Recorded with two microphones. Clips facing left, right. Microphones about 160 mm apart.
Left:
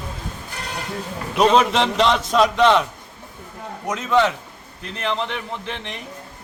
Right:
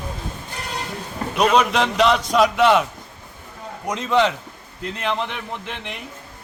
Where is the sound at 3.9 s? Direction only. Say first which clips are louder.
Even; 15° right (ahead or behind).